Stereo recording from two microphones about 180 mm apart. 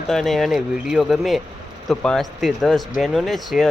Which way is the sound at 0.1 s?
Centre (ahead or behind).